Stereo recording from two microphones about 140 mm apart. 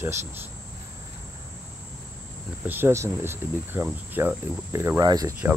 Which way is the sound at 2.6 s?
15° right (ahead or behind).